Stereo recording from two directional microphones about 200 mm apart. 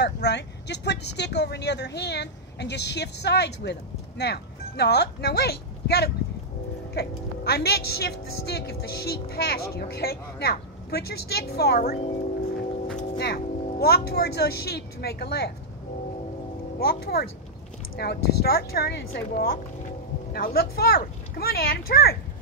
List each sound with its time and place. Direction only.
0.0 s speech: 60° left (ahead or behind)
13.2 s speech: 50° left (ahead or behind)
16.8 s speech: 50° left (ahead or behind)